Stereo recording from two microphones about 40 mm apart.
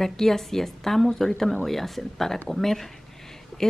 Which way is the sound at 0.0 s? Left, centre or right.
Centre.